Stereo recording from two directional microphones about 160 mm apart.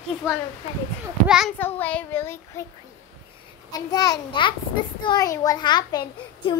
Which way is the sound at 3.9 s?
25° left (ahead or behind).